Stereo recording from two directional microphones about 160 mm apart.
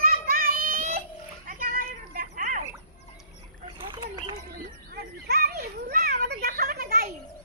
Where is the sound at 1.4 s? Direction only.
60° right (ahead or behind).